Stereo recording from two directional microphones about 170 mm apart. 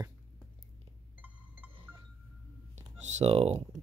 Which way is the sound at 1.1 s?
10° right (ahead or behind).